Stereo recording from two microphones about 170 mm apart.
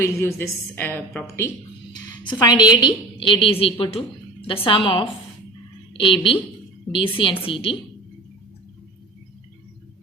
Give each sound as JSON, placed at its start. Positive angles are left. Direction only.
{"t": 0.0, "sound": "a woman's voice", "side_deg": 15}
{"t": 2.4, "sound": "a woman's voice", "side_deg": 25}